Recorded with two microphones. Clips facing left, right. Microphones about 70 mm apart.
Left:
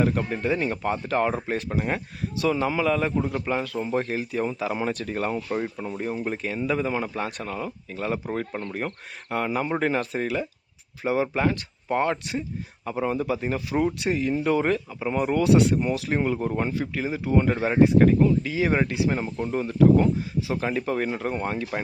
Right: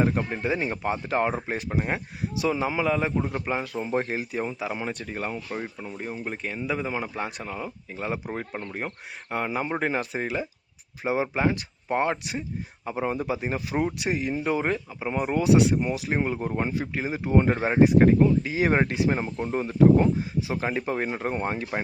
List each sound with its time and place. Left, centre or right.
0.0 s speech: right
4.4 s speech: centre; by 21.8 s right